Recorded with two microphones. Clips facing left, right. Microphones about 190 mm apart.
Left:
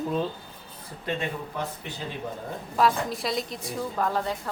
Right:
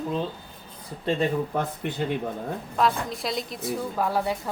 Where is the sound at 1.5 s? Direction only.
50° right (ahead or behind).